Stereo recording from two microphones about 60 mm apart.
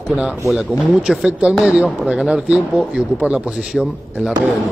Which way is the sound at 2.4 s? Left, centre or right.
Right.